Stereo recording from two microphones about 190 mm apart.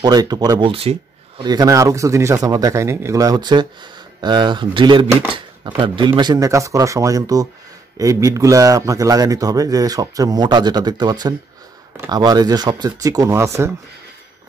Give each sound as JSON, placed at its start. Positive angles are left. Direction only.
{"t": 0.0, "sound": "a man's voice", "side_deg": -20}